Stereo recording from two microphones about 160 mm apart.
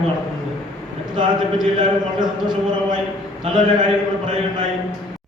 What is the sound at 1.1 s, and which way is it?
A man's voice, 30° right (ahead or behind).